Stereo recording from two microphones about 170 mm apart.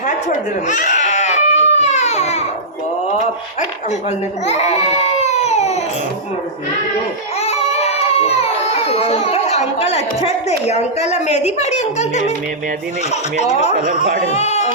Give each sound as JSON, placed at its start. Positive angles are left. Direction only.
{"t": 0.7, "sound": "baby cry", "side_deg": 45}
{"t": 4.4, "sound": "baby cry", "side_deg": 40}
{"t": 7.4, "sound": "baby cry", "side_deg": 40}
{"t": 10.7, "sound": "a woman's voice", "side_deg": 40}